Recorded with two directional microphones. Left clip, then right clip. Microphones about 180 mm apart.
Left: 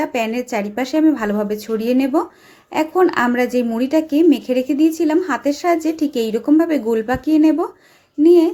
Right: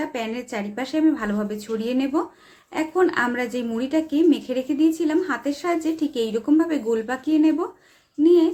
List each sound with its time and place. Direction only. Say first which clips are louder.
0.0 s a woman's voice: left 8 dB; 30° left (ahead or behind)